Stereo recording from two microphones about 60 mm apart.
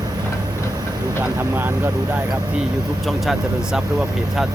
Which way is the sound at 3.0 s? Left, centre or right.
Centre.